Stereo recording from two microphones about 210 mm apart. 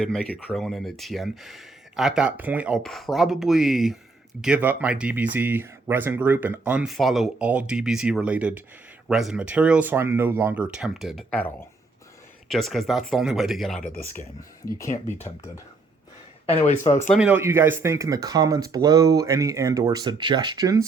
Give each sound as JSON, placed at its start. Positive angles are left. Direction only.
{"t": 0.0, "sound": "speech", "side_deg": 0}
{"t": 14.8, "sound": "speech", "side_deg": 35}
{"t": 16.5, "sound": "speech", "side_deg": 30}
{"t": 17.2, "sound": "speech", "side_deg": -10}